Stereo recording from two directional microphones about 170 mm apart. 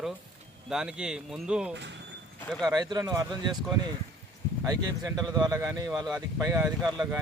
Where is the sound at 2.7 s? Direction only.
20° right (ahead or behind).